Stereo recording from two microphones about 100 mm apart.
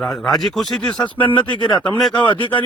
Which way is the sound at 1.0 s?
50° left (ahead or behind).